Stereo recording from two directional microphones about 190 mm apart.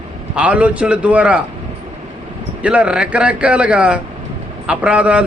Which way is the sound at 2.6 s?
5° right (ahead or behind).